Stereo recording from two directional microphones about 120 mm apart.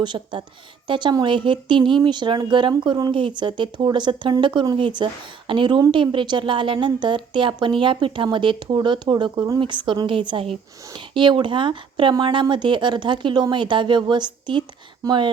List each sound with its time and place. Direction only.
0.0 s a woman's voice: 40° right (ahead or behind)